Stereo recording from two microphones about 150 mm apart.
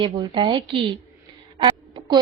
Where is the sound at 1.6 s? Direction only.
30° right (ahead or behind).